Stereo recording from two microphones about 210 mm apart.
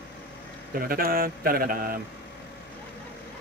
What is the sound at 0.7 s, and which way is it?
Speech, 45° right (ahead or behind).